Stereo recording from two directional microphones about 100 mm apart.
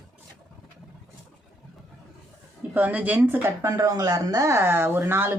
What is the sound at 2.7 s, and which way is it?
Speech, 15° right (ahead or behind).